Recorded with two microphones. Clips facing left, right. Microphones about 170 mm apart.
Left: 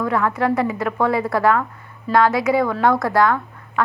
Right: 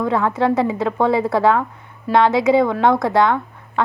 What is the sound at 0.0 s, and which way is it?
A woman's voice, 25° right (ahead or behind).